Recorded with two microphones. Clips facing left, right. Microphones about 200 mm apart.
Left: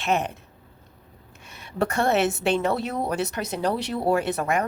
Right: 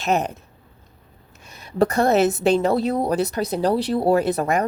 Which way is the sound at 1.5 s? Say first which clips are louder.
Right 6 dB; 40° right (ahead or behind).